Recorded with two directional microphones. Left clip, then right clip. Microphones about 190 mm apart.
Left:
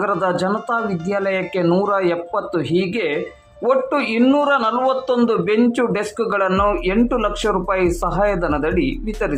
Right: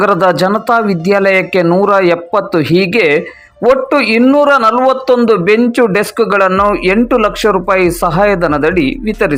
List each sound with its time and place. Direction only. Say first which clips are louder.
0.0 s speech: right 9 dB; 30° right (ahead or behind)